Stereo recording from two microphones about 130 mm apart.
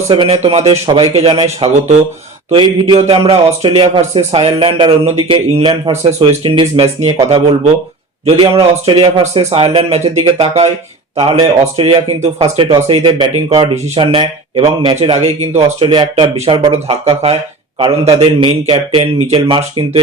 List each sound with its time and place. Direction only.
0.1 s speech: 45° right (ahead or behind)
2.5 s speech: 40° right (ahead or behind)
8.4 s speech: 40° right (ahead or behind); by 10.7 s 55° right (ahead or behind)
11.8 s speech: 45° right (ahead or behind)
13.5 s speech: 45° right (ahead or behind)